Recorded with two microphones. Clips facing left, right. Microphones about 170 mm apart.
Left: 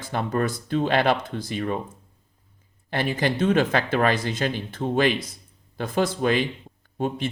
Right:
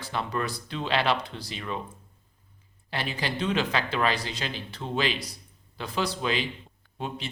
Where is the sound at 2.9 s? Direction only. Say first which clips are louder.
Left 7 dB; 50° left (ahead or behind).